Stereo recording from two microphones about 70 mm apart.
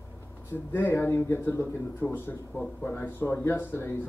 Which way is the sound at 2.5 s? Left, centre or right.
Centre.